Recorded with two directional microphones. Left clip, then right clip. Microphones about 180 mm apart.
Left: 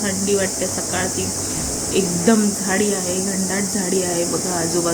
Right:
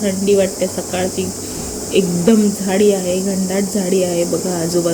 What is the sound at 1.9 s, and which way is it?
Speech, 30° right (ahead or behind).